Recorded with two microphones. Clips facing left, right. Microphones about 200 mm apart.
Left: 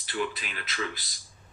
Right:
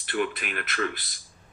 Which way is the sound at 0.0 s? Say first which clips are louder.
Right 4 dB; 55° right (ahead or behind).